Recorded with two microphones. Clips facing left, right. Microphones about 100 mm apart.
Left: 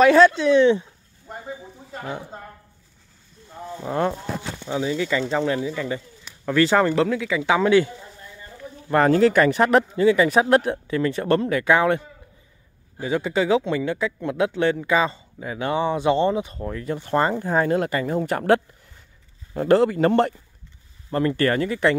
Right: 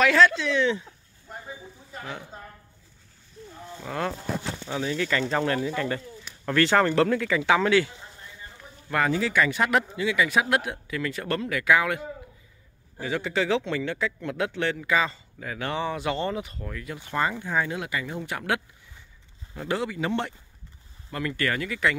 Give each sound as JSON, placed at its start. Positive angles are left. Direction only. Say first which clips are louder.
{"t": 0.0, "sound": "a man's voice", "louder": "left 6 dB", "side_deg": 30}
{"t": 1.4, "sound": "a sound", "louder": "left 6 dB", "side_deg": 50}
{"t": 3.7, "sound": "a man's voice", "louder": "left 7 dB", "side_deg": 25}
{"t": 7.4, "sound": "a man's voice", "louder": "left 5 dB", "side_deg": 20}
{"t": 9.1, "sound": "speech", "louder": "left 8 dB", "side_deg": 50}
{"t": 13.0, "sound": "a man's voice", "louder": "left 5 dB", "side_deg": 20}
{"t": 21.1, "sound": "speech", "louder": "left 8 dB", "side_deg": 35}